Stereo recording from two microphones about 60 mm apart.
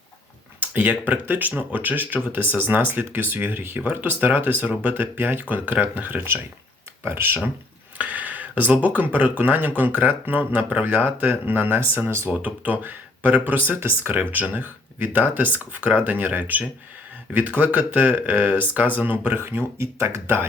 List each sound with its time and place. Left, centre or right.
0.6 s speech: right
7.0 s speech: right
7.9 s speech: right
12.3 s speech: right
19.8 s speech: right